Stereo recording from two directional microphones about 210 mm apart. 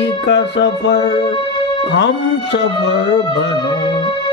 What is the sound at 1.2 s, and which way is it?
Music, 25° left (ahead or behind).